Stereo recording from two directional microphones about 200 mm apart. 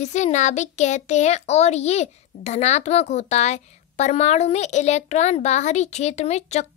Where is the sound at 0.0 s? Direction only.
35° left (ahead or behind).